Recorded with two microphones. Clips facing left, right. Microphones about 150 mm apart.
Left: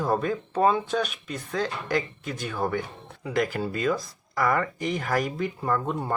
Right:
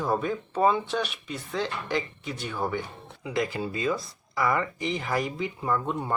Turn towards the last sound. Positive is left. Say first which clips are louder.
# left 1 dB
turn(degrees=45)  # may be behind; listen again after turning